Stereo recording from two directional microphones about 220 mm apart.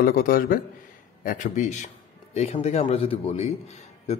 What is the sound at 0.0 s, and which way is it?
Speech, 40° left (ahead or behind).